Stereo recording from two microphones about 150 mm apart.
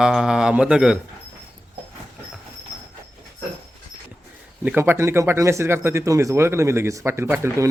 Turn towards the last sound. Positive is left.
turn(degrees=-15)  # may be behind; listen again after turning